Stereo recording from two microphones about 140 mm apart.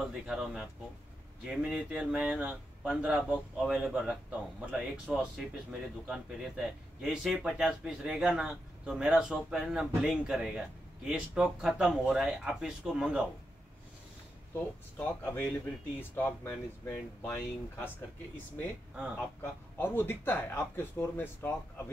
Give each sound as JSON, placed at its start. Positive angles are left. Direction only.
{"t": 0.0, "sound": "a man's voice", "side_deg": -5}
{"t": 14.5, "sound": "speech", "side_deg": 15}
{"t": 19.1, "sound": "speech", "side_deg": 15}